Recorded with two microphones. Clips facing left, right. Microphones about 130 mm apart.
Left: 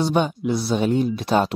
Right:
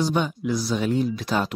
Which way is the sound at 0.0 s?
25° left (ahead or behind).